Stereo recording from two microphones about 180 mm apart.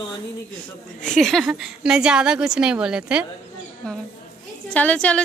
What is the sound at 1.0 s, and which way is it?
A woman's voice, centre (ahead or behind).